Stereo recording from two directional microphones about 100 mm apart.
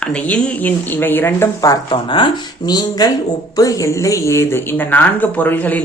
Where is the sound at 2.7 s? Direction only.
40° left (ahead or behind); by 5.8 s 15° left (ahead or behind).